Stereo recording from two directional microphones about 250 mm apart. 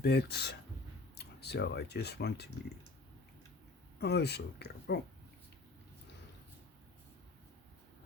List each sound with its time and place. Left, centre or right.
0.0 s speech: left
3.9 s speech: left